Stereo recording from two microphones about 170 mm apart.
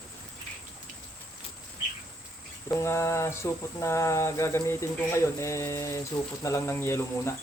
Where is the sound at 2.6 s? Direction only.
15° left (ahead or behind).